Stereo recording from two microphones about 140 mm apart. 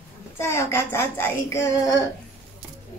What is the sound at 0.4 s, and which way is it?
Speech, 20° left (ahead or behind).